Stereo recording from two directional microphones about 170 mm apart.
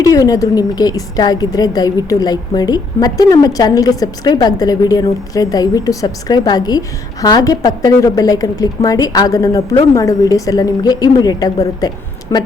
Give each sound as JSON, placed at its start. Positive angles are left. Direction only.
{"t": 0.0, "sound": "a woman's voice", "side_deg": 20}